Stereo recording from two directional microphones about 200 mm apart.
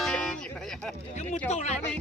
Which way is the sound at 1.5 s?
35° left (ahead or behind).